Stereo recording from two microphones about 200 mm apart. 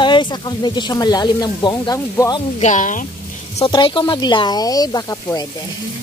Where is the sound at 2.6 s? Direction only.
40° left (ahead or behind).